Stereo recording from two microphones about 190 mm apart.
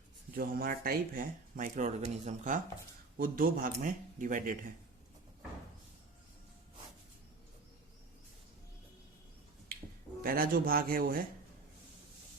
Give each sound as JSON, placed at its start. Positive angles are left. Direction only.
{"t": 0.3, "sound": "speech", "side_deg": -50}
{"t": 10.2, "sound": "speech", "side_deg": -50}